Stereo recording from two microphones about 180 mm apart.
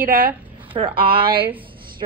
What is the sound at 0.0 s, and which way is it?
Speech, 55° right (ahead or behind).